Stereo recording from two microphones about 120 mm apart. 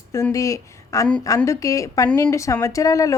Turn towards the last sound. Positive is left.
turn(degrees=30)  # may be behind; listen again after turning